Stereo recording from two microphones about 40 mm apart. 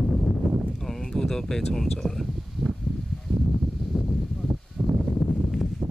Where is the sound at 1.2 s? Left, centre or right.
Centre.